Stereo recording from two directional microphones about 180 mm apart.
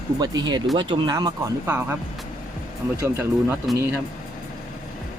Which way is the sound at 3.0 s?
15° right (ahead or behind).